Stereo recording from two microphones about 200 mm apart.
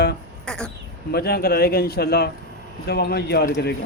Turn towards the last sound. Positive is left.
turn(degrees=55)  # may be behind; listen again after turning